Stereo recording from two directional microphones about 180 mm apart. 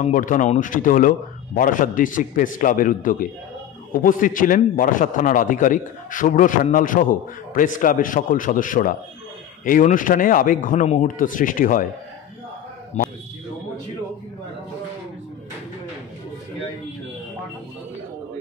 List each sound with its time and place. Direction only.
0.0 s a man's voice: 45° left (ahead or behind)
12.9 s speech: 40° left (ahead or behind)